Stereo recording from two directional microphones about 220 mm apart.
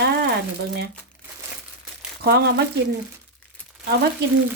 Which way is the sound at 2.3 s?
45° right (ahead or behind).